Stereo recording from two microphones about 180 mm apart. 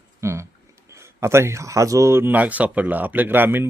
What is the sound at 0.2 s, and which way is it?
Speech, 15° right (ahead or behind).